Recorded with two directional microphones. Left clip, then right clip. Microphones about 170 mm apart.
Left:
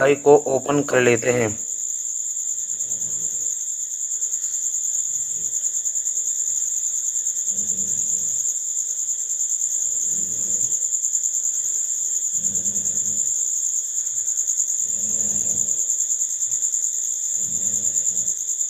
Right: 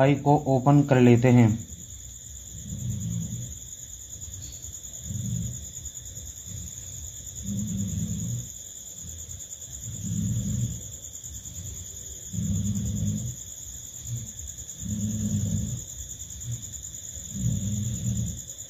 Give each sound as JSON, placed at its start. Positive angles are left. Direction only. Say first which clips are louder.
{"t": 0.0, "sound": "speech", "louder": "left 8 dB", "side_deg": 55}